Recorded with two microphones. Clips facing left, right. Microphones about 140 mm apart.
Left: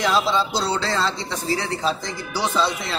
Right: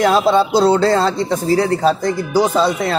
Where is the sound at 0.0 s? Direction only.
50° right (ahead or behind).